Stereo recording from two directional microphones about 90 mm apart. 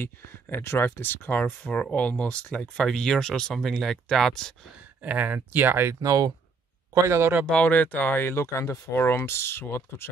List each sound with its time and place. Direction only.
0.0 s speech: 25° left (ahead or behind); by 4.6 s 5° left (ahead or behind)
5.0 s speech: 20° right (ahead or behind)
6.0 s speech: 40° right (ahead or behind); by 7.4 s 25° right (ahead or behind)
7.6 s speech: 20° left (ahead or behind)